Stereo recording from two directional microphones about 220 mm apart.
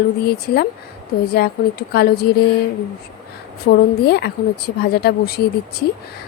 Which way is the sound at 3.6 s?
45° left (ahead or behind).